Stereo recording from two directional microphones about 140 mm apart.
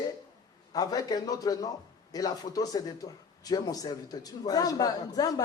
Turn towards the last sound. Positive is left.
turn(degrees=25)  # may be behind; listen again after turning